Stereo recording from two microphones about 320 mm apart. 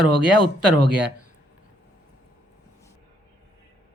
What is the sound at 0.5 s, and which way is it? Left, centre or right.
Speech, right.